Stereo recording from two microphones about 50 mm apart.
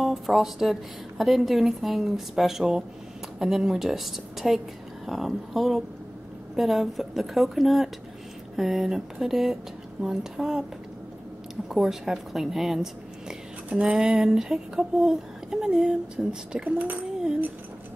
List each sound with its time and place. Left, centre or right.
0.0 s a woman's voice: centre
11.7 s a woman's voice: centre
13.7 s a sound: right
13.9 s speech: centre
16.7 s a child's voice: right